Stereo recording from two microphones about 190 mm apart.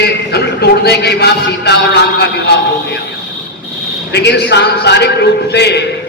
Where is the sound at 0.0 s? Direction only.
60° left (ahead or behind).